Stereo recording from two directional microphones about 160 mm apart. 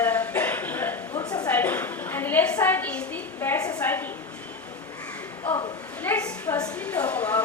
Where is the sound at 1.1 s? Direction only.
25° left (ahead or behind).